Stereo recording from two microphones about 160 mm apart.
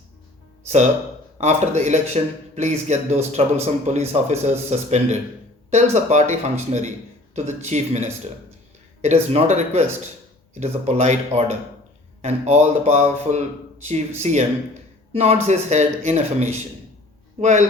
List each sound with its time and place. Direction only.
1.4 s a man's voice: 45° right (ahead or behind)
9.3 s a man's voice: 45° right (ahead or behind)